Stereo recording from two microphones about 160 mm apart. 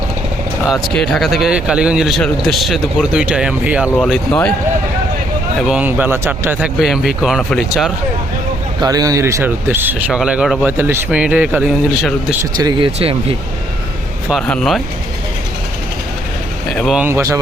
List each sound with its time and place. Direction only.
0.7 s speech: centre (ahead or behind)
3.9 s speech: 5° left (ahead or behind)
5.6 s speech: 10° right (ahead or behind)
6.7 s speech: centre (ahead or behind)
8.8 s speech: 25° right (ahead or behind)
12.5 s speech: 25° right (ahead or behind)
14.4 s speech: 5° left (ahead or behind)
16.7 s speech: centre (ahead or behind)
17.0 s speech: 15° right (ahead or behind)